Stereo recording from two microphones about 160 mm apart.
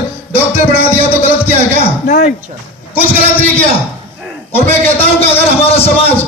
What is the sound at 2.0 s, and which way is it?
Speech, 55° left (ahead or behind).